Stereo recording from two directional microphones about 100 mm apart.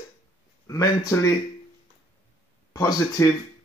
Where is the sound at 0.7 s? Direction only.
35° left (ahead or behind).